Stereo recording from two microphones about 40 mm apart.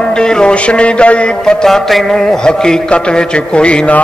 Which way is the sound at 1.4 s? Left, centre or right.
Centre.